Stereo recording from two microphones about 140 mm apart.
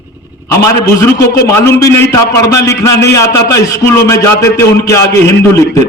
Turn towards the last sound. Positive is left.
turn(degrees=20)  # may be behind; listen again after turning